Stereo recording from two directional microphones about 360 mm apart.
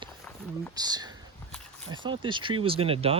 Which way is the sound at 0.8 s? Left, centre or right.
Centre.